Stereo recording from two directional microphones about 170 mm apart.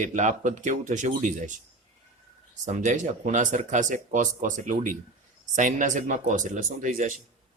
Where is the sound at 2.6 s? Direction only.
45° right (ahead or behind).